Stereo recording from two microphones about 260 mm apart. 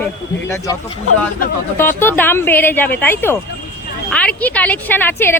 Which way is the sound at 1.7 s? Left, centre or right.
Centre.